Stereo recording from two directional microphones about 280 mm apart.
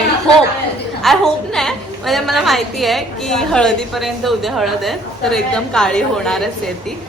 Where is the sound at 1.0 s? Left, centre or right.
Centre.